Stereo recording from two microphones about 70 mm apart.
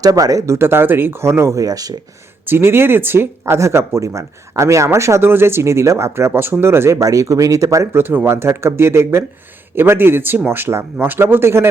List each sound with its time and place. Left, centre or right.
0.0 s speech: right
1.6 s speech: right
2.5 s speech: right
7.0 s speech: right
7.9 s speech: right